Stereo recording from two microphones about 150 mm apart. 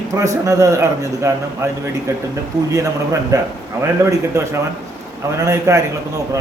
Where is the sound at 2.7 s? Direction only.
20° right (ahead or behind).